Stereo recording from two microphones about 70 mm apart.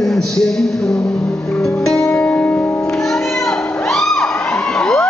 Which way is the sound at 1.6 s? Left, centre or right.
Centre.